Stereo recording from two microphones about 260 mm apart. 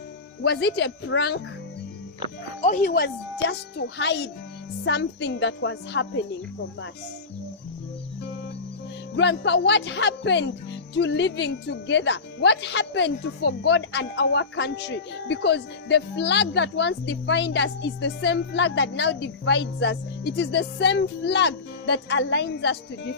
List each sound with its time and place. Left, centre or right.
0.4 s a child's voice: left
2.6 s a child's voice: left
9.1 s speech: left